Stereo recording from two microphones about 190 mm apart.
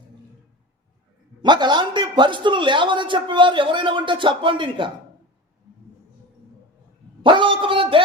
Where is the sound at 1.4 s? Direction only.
25° right (ahead or behind).